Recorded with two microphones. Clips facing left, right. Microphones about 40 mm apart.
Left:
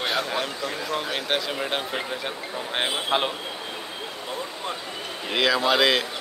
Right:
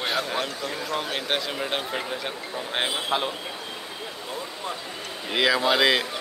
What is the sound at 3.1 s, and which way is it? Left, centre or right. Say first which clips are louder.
Speech: left 3 dB; left.